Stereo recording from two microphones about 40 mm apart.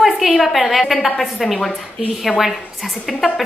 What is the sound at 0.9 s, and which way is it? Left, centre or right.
Speech, centre.